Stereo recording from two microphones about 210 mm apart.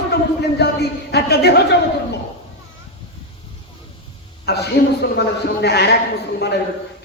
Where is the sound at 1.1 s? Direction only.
50° left (ahead or behind).